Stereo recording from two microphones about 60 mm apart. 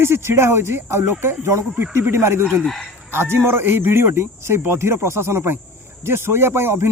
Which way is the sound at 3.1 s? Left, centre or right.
Right.